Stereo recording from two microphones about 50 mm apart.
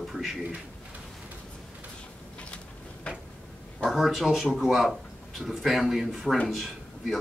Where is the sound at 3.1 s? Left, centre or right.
Left.